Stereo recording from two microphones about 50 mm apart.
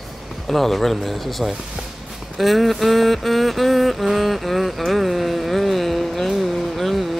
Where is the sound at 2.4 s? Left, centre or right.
Centre.